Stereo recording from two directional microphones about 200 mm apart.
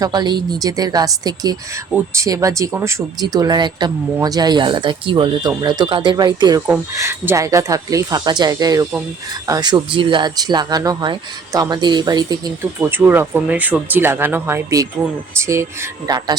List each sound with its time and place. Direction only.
0.0 s speech: 20° right (ahead or behind)